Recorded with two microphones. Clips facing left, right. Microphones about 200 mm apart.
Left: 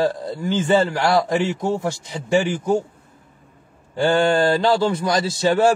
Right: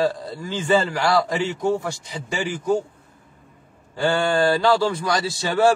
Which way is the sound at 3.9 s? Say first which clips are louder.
Left 3 dB; 20° left (ahead or behind).